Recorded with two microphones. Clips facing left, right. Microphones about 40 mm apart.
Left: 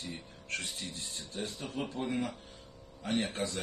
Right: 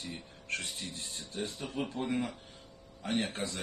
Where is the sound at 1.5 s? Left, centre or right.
Centre.